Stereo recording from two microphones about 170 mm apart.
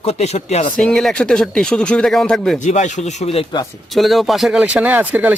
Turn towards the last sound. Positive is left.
turn(degrees=-10)  # may be behind; listen again after turning